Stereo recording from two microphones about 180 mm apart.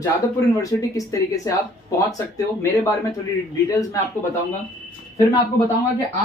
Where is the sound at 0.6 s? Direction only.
20° left (ahead or behind).